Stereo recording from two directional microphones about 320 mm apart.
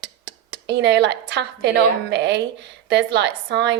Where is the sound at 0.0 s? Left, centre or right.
Right.